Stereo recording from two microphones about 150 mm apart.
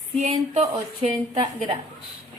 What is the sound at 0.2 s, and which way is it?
Speech, 45° right (ahead or behind).